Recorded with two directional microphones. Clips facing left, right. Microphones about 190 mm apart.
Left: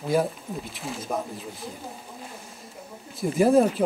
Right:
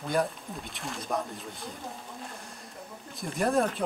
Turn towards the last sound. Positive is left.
turn(degrees=0)  # may be behind; listen again after turning